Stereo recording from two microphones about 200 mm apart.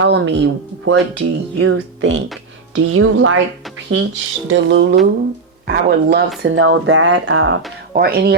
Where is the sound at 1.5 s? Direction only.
90° right.